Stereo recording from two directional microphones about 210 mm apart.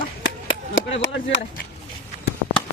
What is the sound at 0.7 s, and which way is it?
Speech, 60° left (ahead or behind).